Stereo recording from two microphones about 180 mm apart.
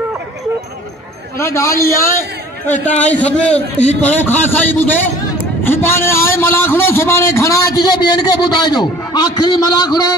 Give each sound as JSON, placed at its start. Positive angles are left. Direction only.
{"t": 1.4, "sound": "a man's voice", "side_deg": 15}